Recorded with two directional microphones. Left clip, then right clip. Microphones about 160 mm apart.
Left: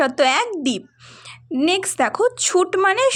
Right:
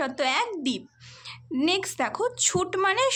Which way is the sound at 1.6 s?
40° left (ahead or behind).